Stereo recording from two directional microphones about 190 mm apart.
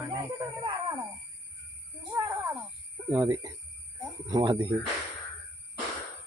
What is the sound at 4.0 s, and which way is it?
Cricket, 20° right (ahead or behind).